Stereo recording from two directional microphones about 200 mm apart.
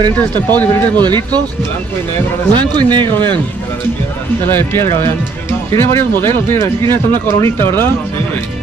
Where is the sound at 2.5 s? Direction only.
25° right (ahead or behind).